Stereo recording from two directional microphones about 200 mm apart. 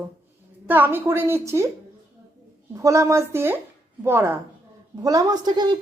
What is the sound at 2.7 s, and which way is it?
A woman's voice, 15° right (ahead or behind).